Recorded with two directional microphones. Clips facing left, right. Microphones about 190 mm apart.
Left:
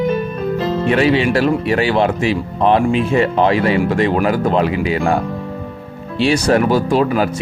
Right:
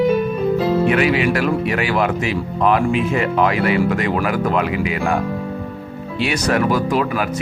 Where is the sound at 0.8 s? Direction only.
30° left (ahead or behind).